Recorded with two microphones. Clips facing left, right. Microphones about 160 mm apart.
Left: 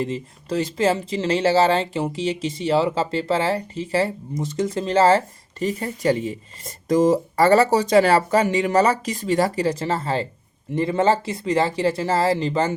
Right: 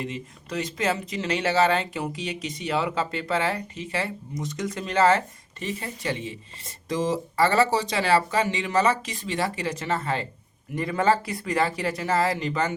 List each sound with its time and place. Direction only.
0.0 s speech: 35° left (ahead or behind)